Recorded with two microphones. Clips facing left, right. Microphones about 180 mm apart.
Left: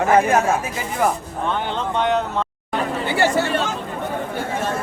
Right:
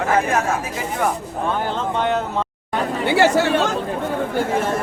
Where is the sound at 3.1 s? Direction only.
80° right.